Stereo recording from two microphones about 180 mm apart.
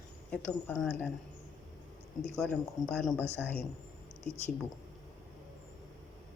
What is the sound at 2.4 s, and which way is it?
Speech, centre (ahead or behind).